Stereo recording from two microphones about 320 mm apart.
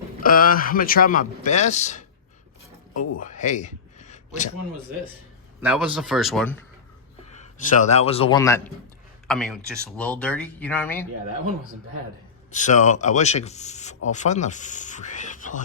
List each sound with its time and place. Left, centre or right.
0.2 s a man's voice: left
2.9 s speech: left
3.2 s a sound: left
5.5 s speech: centre
7.7 s a man's voice: left; by 11.0 s centre
12.5 s speech: left